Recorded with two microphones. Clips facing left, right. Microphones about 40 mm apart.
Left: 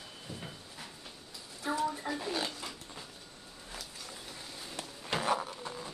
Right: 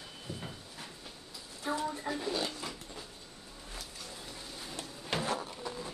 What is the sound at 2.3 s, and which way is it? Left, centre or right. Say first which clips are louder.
Speech: right 1 dB; centre.